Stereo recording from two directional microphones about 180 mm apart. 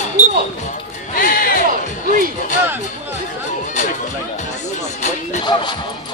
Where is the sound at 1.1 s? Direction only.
55° left (ahead or behind).